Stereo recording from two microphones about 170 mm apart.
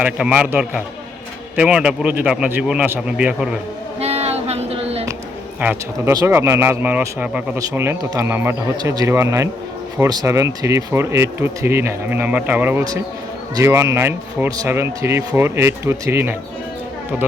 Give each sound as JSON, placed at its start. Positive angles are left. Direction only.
{"t": 0.0, "sound": "speech", "side_deg": -5}
{"t": 4.0, "sound": "a sound", "side_deg": -40}
{"t": 5.5, "sound": "speech", "side_deg": -10}